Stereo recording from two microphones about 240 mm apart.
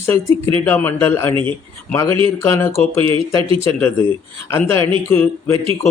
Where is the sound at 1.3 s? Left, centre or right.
Right.